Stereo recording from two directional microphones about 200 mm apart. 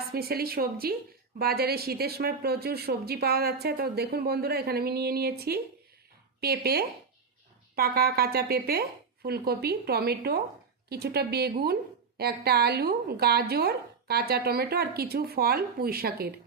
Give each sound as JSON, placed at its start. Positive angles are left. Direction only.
{"t": 0.1, "sound": "a woman's voice", "side_deg": -50}